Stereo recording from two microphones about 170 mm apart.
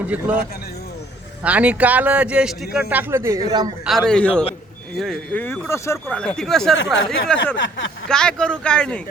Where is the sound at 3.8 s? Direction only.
Centre (ahead or behind).